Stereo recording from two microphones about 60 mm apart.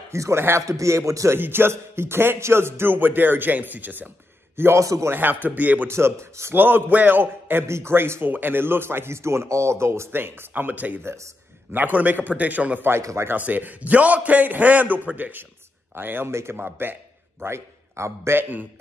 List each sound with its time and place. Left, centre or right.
0.1 s a man's voice: right
0.7 s a man's voice: right
1.3 s a man's voice: right
4.7 s a man's voice: right
5.1 s a man's voice: right
5.9 s a man's voice: right
6.5 s a man's voice: right
11.0 s a man's voice: right
11.7 s a man's voice: right
13.0 s a man's voice: right
13.3 s a man's voice: right
16.3 s a man's voice: right
16.5 s a man's voice: right
17.4 s a man's voice: right